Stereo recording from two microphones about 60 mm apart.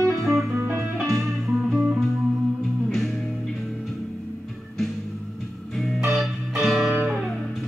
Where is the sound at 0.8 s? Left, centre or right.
Centre.